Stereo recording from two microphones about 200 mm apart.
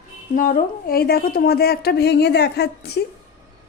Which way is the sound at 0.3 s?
45° left (ahead or behind).